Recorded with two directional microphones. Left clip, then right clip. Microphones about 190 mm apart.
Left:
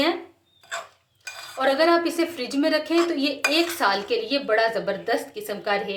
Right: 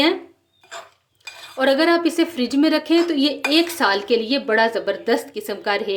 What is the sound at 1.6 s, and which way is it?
Speech, 45° right (ahead or behind).